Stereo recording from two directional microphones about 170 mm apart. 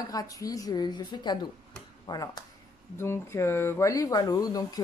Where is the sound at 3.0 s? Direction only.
15° left (ahead or behind).